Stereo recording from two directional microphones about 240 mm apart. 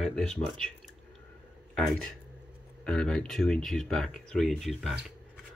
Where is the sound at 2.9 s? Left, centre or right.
Centre.